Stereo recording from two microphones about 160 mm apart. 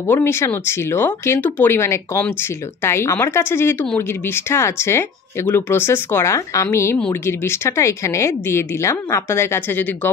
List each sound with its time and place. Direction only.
0.0 s speech: 15° left (ahead or behind)